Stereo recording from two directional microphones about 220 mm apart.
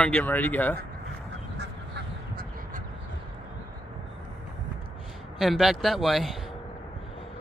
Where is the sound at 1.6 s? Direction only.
50° right (ahead or behind).